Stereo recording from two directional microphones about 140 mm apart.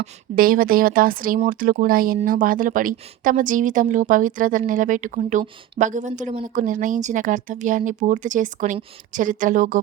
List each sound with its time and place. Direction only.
0.3 s speech: 90° right
2.2 s speech: 80° right